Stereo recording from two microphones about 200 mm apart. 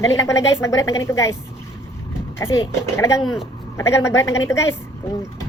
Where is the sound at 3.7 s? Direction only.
15° left (ahead or behind).